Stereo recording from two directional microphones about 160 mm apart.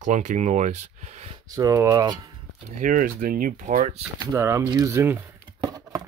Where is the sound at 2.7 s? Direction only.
55° right (ahead or behind).